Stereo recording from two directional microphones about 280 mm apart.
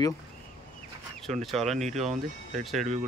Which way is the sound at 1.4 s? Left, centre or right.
Centre.